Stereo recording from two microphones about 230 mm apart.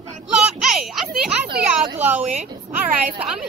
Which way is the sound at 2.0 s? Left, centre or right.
Centre.